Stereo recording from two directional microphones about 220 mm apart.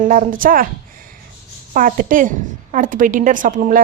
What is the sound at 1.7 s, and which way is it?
A woman's voice, 40° right (ahead or behind).